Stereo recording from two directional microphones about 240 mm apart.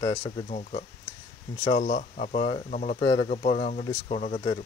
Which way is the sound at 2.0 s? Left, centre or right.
Left.